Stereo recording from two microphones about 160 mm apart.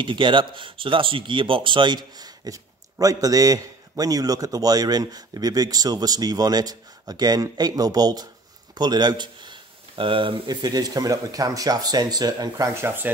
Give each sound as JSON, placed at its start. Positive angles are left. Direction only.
{"t": 0.0, "sound": "speech", "side_deg": -30}